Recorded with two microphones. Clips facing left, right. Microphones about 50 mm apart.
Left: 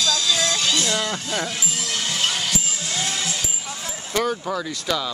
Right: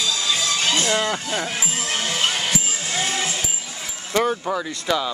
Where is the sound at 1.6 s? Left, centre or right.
Right.